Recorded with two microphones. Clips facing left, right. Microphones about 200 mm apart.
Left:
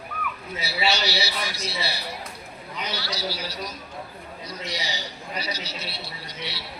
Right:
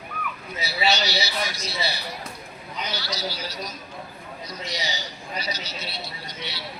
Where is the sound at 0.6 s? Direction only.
30° left (ahead or behind).